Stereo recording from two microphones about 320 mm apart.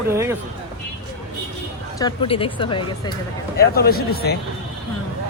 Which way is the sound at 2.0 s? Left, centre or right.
Centre.